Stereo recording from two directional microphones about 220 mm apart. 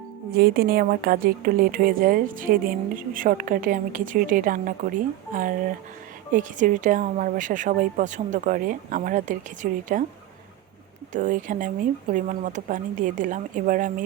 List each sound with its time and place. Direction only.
0.3 s a woman's voice: 45° right (ahead or behind)
11.1 s a woman's voice: 35° right (ahead or behind)